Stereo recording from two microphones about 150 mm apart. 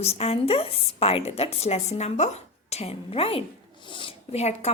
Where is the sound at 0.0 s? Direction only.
40° left (ahead or behind).